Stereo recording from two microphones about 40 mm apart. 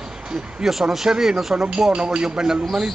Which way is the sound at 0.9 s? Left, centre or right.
Centre.